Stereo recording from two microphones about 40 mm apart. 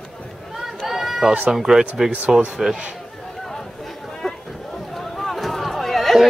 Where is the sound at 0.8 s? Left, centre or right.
Centre.